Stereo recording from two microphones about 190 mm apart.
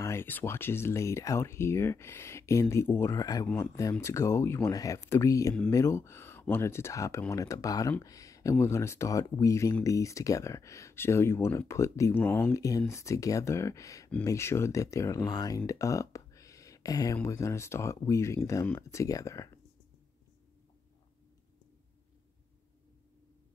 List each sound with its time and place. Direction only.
0.0 s speech: 15° left (ahead or behind)